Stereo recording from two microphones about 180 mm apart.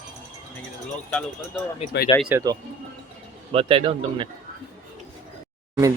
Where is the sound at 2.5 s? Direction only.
20° right (ahead or behind).